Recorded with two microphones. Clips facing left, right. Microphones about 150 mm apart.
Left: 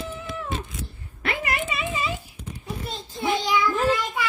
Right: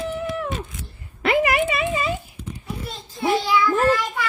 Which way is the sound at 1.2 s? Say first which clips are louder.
Right 9 dB; 90° right.